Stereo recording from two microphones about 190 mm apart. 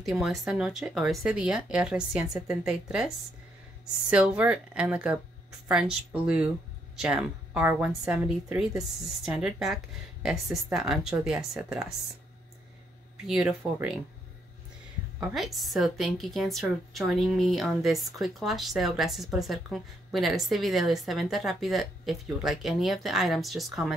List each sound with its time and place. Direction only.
0.0 s a woman's voice: centre (ahead or behind)
4.1 s a woman's voice: 5° right (ahead or behind)
13.3 s a woman's voice: centre (ahead or behind)
15.1 s a woman's voice: centre (ahead or behind)